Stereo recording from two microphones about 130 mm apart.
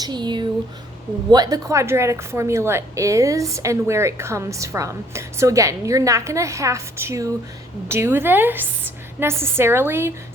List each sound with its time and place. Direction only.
0.0 s a woman's voice: 35° right (ahead or behind); by 10.1 s 15° right (ahead or behind)